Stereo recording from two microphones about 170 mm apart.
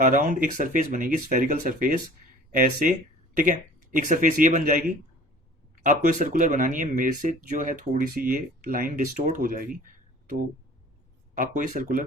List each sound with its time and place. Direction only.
0.0 s speech: 50° right (ahead or behind)
11.3 s speech: 55° right (ahead or behind)